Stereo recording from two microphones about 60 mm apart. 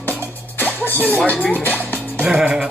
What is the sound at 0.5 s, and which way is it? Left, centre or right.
Speech, left.